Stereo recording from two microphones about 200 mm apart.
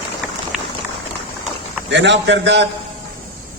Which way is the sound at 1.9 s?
60° right (ahead or behind).